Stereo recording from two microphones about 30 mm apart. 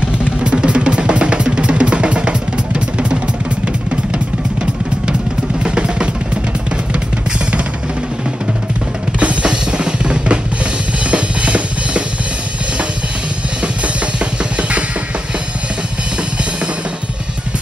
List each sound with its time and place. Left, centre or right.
0.0 s drum: right
5.6 s drum kit: right
9.2 s drum kit: right
9.5 s drum kit: right
14.6 s drum: right